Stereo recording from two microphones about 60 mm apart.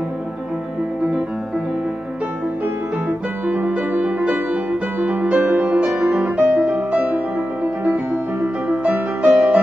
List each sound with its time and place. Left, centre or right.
3.1 s music: right
7.8 s music: right